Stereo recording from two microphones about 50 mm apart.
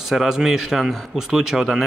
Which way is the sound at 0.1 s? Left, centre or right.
Centre.